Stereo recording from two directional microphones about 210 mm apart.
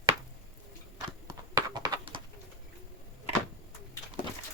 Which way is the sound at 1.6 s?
20° right (ahead or behind).